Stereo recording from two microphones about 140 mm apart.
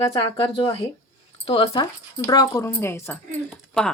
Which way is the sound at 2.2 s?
25° left (ahead or behind).